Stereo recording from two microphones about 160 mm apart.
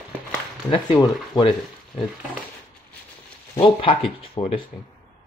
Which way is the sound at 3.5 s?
35° left (ahead or behind).